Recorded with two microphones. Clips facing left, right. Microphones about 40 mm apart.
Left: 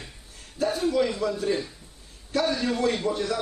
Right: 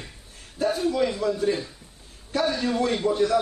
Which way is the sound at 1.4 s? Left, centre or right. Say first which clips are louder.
Right 2 dB; centre.